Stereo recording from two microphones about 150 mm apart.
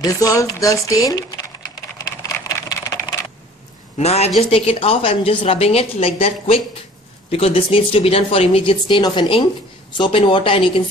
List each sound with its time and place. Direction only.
0.0 s speech: 20° left (ahead or behind)
2.0 s vehicle: 25° left (ahead or behind)
4.0 s a woman's voice: 45° left (ahead or behind)